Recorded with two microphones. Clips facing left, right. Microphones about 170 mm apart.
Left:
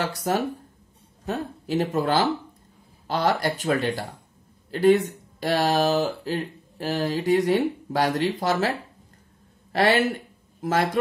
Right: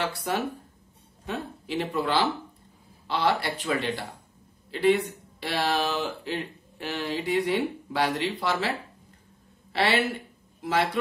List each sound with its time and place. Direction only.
0.0 s speech: 40° left (ahead or behind)